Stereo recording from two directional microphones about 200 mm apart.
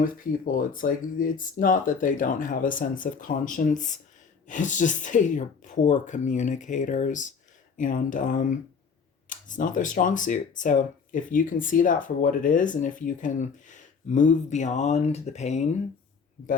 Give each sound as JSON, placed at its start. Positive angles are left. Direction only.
{"t": 0.0, "sound": "speech", "side_deg": 45}